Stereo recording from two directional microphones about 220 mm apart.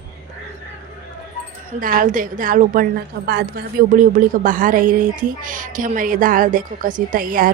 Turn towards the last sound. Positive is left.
turn(degrees=-40)  # may be behind; listen again after turning